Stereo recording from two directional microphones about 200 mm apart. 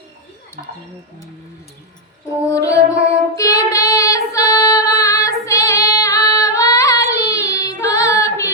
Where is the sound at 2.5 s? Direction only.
15° left (ahead or behind).